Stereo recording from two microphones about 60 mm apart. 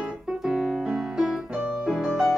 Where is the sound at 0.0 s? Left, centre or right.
Centre.